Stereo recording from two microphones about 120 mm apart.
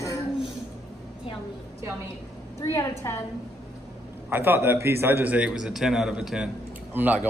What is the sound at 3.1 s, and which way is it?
Speech, 25° left (ahead or behind).